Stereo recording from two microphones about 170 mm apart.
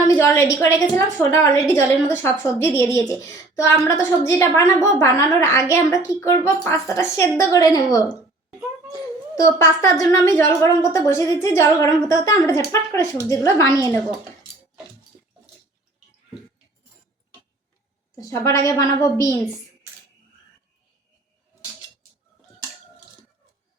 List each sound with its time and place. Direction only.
0.0 s a woman's voice: 15° left (ahead or behind)
18.2 s a woman's voice: 15° left (ahead or behind)